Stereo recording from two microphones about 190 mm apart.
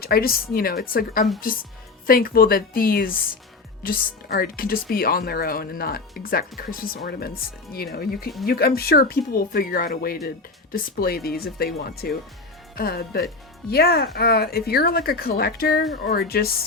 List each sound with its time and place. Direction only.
0.0 s speech: 50° left (ahead or behind)
8.4 s speech: 55° left (ahead or behind)